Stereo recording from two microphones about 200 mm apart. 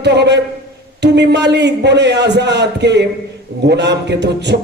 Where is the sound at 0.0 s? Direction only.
60° right (ahead or behind).